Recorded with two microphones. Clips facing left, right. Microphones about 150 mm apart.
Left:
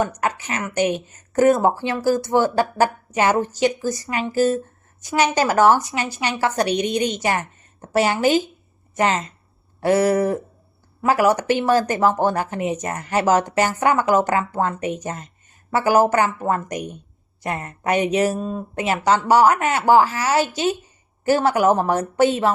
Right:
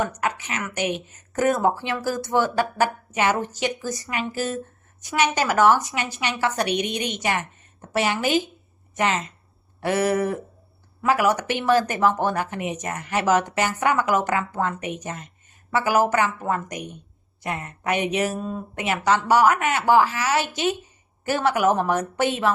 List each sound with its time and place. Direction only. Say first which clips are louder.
0.0 s speech: left 3 dB; 35° left (ahead or behind)